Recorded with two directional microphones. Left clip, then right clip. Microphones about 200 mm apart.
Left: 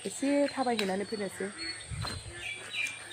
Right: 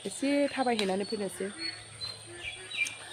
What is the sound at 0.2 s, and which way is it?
Speech, 10° left (ahead or behind).